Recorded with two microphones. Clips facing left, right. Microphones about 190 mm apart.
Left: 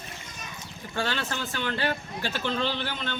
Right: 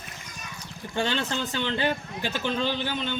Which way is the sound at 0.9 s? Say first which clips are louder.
Right 3 dB; 20° right (ahead or behind).